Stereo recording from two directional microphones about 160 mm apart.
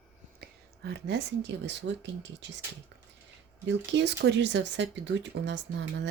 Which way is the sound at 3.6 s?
90° right.